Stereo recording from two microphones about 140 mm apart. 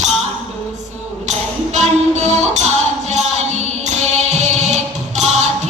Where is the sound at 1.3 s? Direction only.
55° right (ahead or behind).